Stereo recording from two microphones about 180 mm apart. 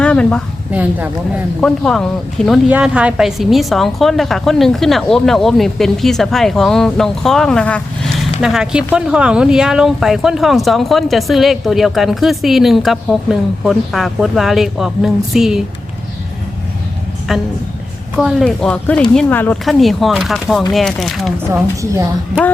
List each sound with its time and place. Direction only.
0.0 s a sound: 5° left (ahead or behind)
0.7 s speech: 10° right (ahead or behind)
1.6 s a woman's voice: 5° left (ahead or behind)
18.2 s a woman's voice: centre (ahead or behind)
21.5 s speech: 15° right (ahead or behind)
22.3 s a woman's voice: 5° left (ahead or behind)